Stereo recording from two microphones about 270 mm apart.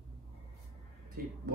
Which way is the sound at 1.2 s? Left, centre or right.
Right.